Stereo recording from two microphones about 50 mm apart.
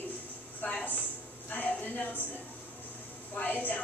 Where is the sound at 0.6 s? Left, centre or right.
Left.